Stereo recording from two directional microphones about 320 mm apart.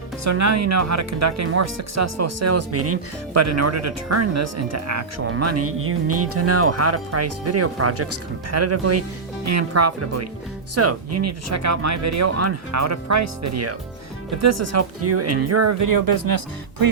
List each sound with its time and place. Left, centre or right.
0.3 s speech: right
15.8 s speech: right